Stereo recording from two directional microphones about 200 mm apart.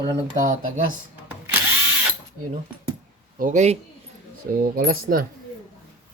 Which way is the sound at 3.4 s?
40° right (ahead or behind).